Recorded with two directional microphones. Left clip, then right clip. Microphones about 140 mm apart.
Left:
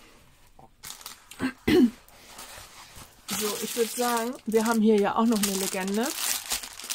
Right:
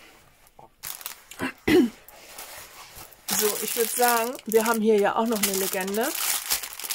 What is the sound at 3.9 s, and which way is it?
Speech, 20° right (ahead or behind).